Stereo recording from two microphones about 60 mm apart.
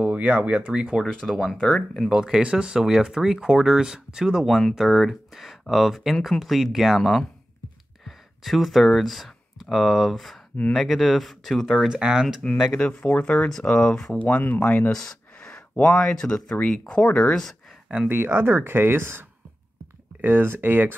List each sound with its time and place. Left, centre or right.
0.0 s speech: right
1.0 s speech: centre
1.6 s speech: centre
2.0 s speech: centre
4.5 s speech: centre
8.5 s speech: centre
12.0 s speech: centre
12.7 s speech: left
13.5 s speech: centre
14.1 s speech: left
14.9 s a sound: centre
15.8 s speech: centre
18.0 s speech: right